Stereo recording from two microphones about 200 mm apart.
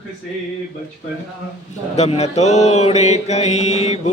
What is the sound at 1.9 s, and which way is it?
Mantra, 30° left (ahead or behind).